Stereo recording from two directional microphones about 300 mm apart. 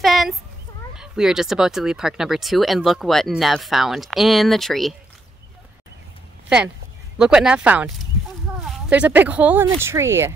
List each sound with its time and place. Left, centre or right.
0.0 s a sound: centre
0.9 s speech: centre
7.2 s speech: centre